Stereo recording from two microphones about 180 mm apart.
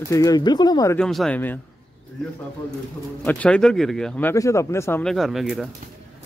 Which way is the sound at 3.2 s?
10° left (ahead or behind).